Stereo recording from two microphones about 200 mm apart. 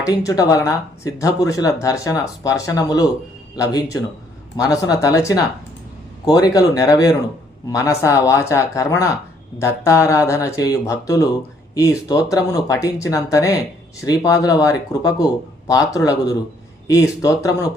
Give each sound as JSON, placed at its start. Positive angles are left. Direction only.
{"t": 0.2, "sound": "speech", "side_deg": 15}